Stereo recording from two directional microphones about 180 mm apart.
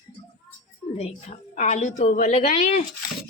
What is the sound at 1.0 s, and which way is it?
A woman's voice, 35° left (ahead or behind).